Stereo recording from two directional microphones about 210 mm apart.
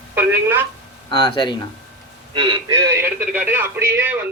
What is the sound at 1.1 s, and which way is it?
Speech, 20° left (ahead or behind).